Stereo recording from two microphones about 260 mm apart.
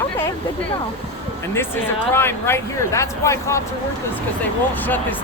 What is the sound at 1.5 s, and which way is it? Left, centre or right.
Speech, centre.